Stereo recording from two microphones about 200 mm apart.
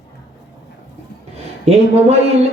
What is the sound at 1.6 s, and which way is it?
Speech, 30° right (ahead or behind).